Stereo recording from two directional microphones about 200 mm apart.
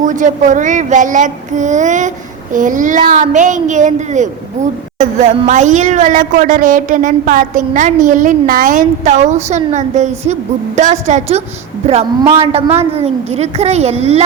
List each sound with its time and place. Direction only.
0.0 s a woman's voice: 40° right (ahead or behind)